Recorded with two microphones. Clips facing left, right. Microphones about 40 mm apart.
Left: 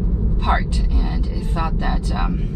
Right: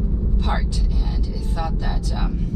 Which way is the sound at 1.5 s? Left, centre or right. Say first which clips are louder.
Left 4 dB; left.